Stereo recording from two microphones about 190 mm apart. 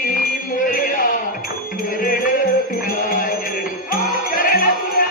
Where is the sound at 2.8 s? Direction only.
45° left (ahead or behind).